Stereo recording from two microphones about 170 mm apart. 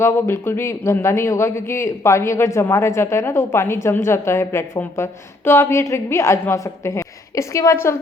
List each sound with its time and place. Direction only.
0.0 s a man's voice: 15° left (ahead or behind)